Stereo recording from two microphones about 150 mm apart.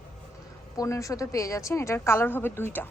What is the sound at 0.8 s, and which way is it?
A woman's voice, 20° left (ahead or behind).